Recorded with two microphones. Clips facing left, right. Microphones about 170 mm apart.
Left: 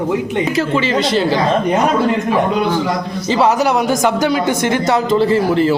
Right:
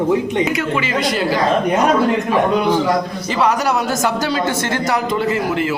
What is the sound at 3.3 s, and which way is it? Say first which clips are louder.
Speech: left 4 dB; 25° left (ahead or behind).